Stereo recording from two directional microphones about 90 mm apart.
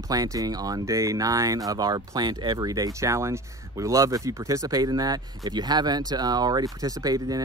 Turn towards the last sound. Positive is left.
turn(degrees=-45)  # may be behind; listen again after turning